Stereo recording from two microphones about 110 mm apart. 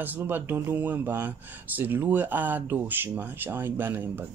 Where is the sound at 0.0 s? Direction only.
15° right (ahead or behind).